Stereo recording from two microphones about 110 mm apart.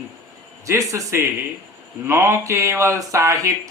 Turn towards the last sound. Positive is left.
turn(degrees=-30)  # may be behind; listen again after turning